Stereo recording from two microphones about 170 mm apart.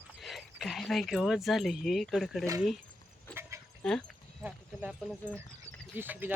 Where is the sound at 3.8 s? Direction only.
5° left (ahead or behind).